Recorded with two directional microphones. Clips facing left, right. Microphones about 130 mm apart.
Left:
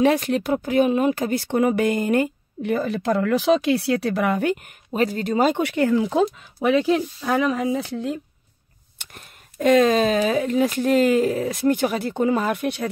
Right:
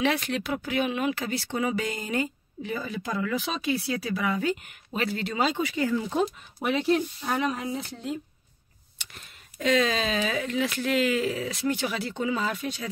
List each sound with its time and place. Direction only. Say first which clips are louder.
0.0 s speech: left 8 dB; 40° left (ahead or behind); by 4.6 s 65° left (ahead or behind)
4.6 s speech: left 7 dB; 40° left (ahead or behind)
5.6 s speech: left 7 dB; 65° left (ahead or behind); by 8.2 s 90° left
8.9 s speech: left 4 dB; 50° left (ahead or behind)